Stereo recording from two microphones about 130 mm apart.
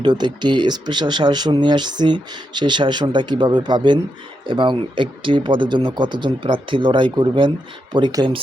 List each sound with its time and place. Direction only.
0.0 s speech: 35° right (ahead or behind)